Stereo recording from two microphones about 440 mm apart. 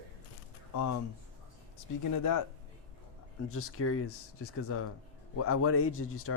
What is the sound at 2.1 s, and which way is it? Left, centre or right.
Speech, left.